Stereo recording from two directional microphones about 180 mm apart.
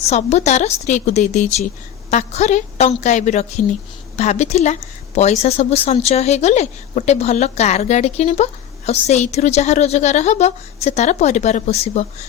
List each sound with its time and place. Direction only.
0.0 s a woman's voice: 40° left (ahead or behind)